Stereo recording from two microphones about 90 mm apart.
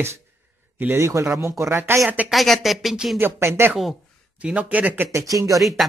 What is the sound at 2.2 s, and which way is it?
Speech, centre (ahead or behind).